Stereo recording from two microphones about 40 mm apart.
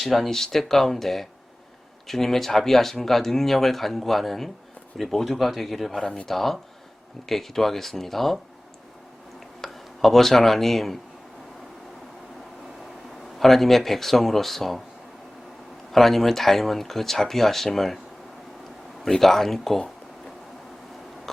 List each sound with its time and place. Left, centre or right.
0.0 s speech: centre
9.6 s speech: centre
13.4 s speech: centre
15.9 s speech: centre
19.0 s speech: centre